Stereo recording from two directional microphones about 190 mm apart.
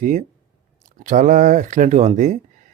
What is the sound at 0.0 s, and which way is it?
Speech, 45° right (ahead or behind).